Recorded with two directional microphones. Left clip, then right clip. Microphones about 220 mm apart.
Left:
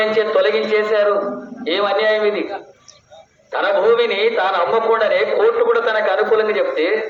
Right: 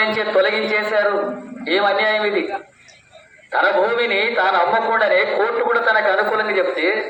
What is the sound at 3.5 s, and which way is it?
A man's voice, 35° left (ahead or behind).